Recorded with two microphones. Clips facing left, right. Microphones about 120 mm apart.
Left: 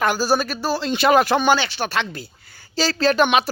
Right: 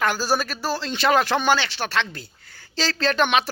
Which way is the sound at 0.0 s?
5° left (ahead or behind).